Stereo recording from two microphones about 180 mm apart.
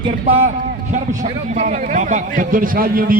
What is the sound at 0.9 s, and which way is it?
A man's voice, 45° right (ahead or behind).